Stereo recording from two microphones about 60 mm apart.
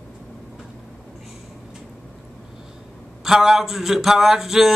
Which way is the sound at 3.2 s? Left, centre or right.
Centre.